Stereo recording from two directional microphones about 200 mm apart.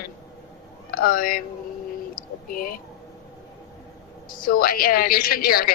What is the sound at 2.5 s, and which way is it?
Speech, 45° left (ahead or behind).